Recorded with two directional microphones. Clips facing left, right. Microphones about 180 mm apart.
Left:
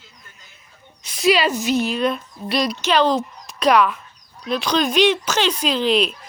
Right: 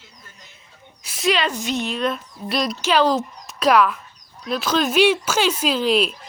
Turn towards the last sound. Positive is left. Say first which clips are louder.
# even
turn(degrees=0)  # may be behind; listen again after turning